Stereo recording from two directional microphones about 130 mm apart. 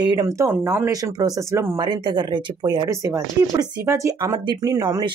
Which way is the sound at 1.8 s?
35° right (ahead or behind).